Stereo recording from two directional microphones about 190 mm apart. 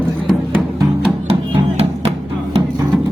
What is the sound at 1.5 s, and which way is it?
Music, 30° right (ahead or behind).